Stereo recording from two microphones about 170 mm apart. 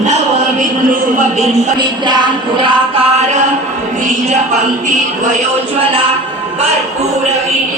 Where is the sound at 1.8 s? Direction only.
25° right (ahead or behind).